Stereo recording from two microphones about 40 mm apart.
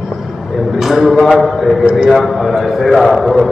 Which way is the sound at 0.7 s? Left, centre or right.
Centre.